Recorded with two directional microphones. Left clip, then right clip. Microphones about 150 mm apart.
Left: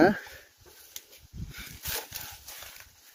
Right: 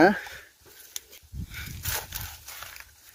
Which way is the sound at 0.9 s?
60° right (ahead or behind).